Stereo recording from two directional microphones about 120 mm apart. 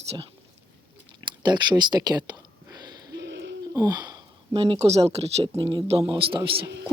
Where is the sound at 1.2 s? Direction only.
40° right (ahead or behind).